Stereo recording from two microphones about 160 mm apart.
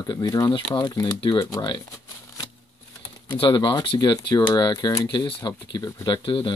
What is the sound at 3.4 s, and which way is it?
Speech, 30° left (ahead or behind).